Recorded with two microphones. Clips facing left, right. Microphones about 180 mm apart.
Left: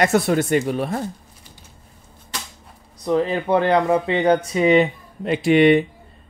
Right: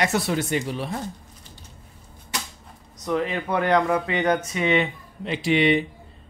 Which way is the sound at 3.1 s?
30° left (ahead or behind).